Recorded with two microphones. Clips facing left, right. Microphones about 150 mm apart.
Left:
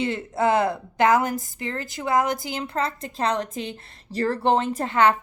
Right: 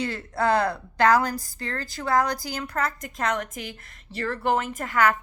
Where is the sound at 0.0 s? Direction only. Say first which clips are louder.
Left 3 dB; 20° left (ahead or behind).